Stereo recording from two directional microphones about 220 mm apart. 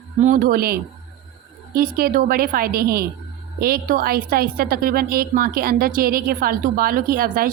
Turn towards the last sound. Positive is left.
turn(degrees=-40)  # may be behind; listen again after turning